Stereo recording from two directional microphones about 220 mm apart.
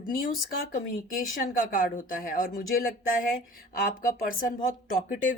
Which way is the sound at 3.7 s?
40° left (ahead or behind).